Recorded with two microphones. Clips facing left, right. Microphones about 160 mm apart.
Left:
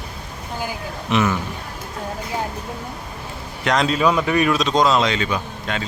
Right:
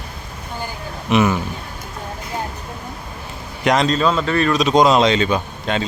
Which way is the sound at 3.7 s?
10° left (ahead or behind).